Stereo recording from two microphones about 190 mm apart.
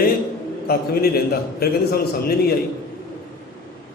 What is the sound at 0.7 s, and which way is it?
A man's voice, 50° left (ahead or behind).